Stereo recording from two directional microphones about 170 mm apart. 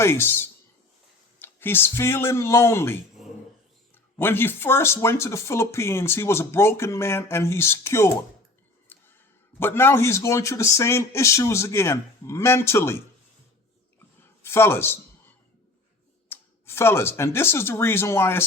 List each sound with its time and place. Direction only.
0.0 s speech: 15° left (ahead or behind)
8.9 s a sound: 10° left (ahead or behind)
9.6 s speech: 10° left (ahead or behind)
14.4 s speech: 15° left (ahead or behind)
16.3 s speech: 15° left (ahead or behind)